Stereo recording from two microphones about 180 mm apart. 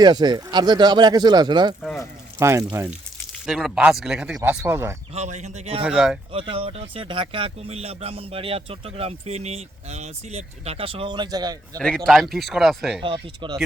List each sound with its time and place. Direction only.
0.0 s speech: 25° right (ahead or behind)
3.3 s speech: centre (ahead or behind); by 4.9 s 15° right (ahead or behind)
5.1 s speech: 40° right (ahead or behind)
5.8 s speech: 5° right (ahead or behind)
6.5 s speech: 30° right (ahead or behind)
11.8 s speech: 5° left (ahead or behind)
13.0 s speech: 30° right (ahead or behind)